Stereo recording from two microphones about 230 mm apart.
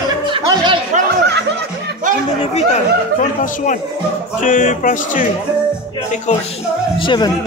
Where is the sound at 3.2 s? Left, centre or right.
Left.